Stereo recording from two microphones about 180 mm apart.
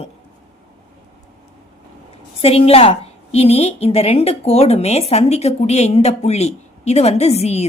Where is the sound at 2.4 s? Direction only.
35° left (ahead or behind).